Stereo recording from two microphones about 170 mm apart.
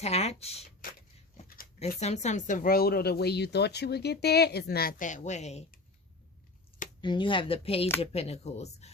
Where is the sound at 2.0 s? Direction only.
40° left (ahead or behind).